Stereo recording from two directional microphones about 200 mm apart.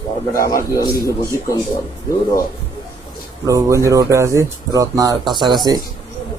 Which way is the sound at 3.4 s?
15° right (ahead or behind).